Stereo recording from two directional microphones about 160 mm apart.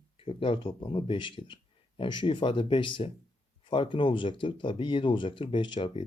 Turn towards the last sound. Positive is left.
turn(degrees=35)  # may be behind; listen again after turning